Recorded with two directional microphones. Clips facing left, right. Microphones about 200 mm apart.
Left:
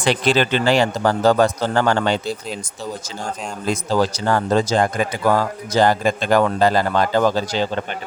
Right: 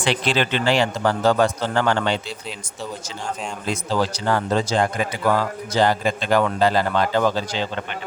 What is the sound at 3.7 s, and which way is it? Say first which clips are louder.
Speech: left 4 dB; 40° left (ahead or behind).